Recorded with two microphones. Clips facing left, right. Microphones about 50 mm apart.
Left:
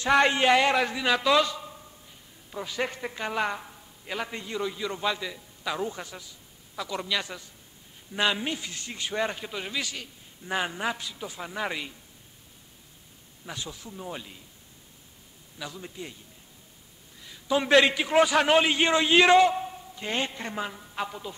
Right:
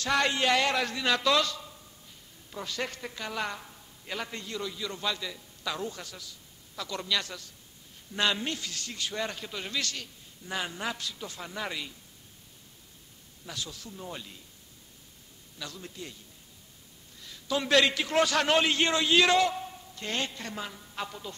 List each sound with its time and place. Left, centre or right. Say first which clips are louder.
0.0 s a man's voice: left 5 dB; left
10.4 s a man's voice: left 5 dB; left
13.5 s a man's voice: left 2 dB; left
15.6 s a man's voice: left 3 dB; centre
17.2 s a man's voice: left 5 dB; centre